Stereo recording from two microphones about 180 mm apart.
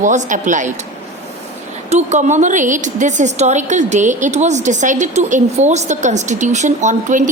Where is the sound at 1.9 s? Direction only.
40° right (ahead or behind).